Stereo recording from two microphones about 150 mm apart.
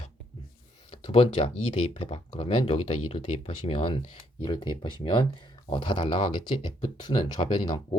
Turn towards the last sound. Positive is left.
turn(degrees=35)  # may be behind; listen again after turning